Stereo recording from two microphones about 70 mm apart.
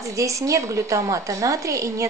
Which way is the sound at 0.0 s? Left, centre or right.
Right.